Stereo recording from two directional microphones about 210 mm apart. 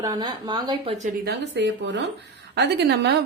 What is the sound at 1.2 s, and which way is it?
A woman's voice, 55° right (ahead or behind).